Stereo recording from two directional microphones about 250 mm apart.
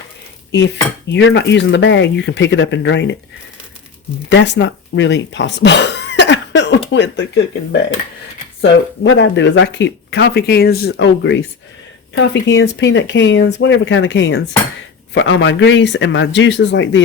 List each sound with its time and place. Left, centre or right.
1.1 s speech: left
4.3 s speech: left